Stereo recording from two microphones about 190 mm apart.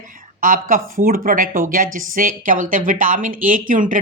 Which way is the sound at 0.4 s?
45° right (ahead or behind).